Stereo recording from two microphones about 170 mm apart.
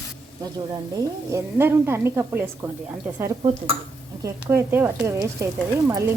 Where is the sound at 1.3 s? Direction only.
15° right (ahead or behind).